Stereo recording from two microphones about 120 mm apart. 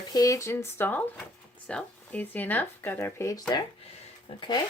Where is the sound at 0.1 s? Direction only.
30° left (ahead or behind).